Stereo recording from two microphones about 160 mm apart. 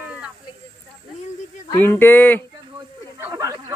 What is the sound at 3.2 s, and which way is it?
Speech, 20° right (ahead or behind).